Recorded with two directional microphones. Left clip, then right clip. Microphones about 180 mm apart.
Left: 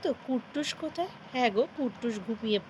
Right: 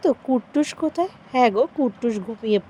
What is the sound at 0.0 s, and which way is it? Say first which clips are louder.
Speech: right 11 dB; 45° right (ahead or behind).